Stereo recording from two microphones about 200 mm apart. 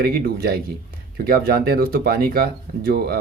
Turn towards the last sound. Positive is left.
turn(degrees=-50)  # may be behind; listen again after turning